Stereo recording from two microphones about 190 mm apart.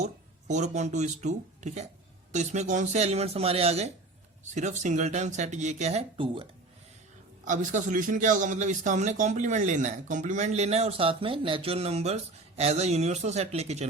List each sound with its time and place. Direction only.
0.0 s speech: 40° right (ahead or behind)
7.4 s speech: 40° right (ahead or behind)